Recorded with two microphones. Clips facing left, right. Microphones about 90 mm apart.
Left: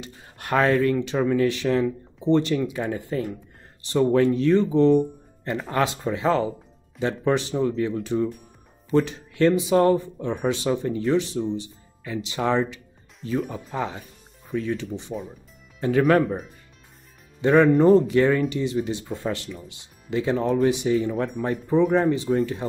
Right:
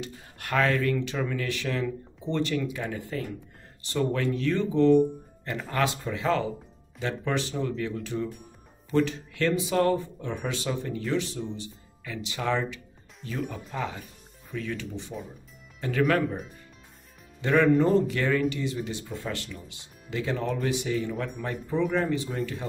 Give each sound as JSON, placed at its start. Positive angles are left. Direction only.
{"t": 0.0, "sound": "speech", "side_deg": 25}
{"t": 13.4, "sound": "speech", "side_deg": 0}
{"t": 14.5, "sound": "speech", "side_deg": 40}
{"t": 15.1, "sound": "speech", "side_deg": 25}
{"t": 17.4, "sound": "speech", "side_deg": 30}